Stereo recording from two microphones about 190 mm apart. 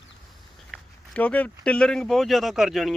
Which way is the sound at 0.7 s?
5° left (ahead or behind).